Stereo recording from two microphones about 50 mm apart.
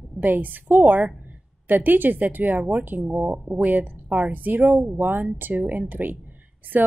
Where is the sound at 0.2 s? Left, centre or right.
Right.